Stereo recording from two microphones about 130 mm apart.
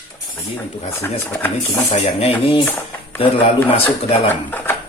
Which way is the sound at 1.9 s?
50° left (ahead or behind).